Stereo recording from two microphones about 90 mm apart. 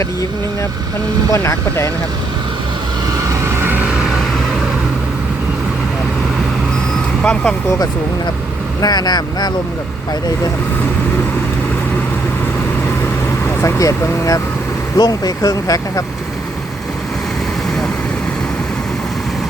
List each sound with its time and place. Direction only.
1.3 s speech: 30° left (ahead or behind)
3.4 s vehicle: 25° right (ahead or behind)
7.2 s speech: 10° left (ahead or behind)
8.8 s speech: 50° left (ahead or behind)
13.4 s speech: 30° left (ahead or behind)